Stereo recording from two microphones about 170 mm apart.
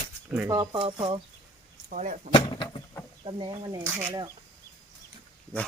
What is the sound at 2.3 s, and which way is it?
Vehicle, 25° left (ahead or behind).